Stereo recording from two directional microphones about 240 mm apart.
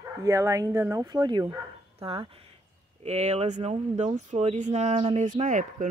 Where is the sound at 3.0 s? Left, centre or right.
Right.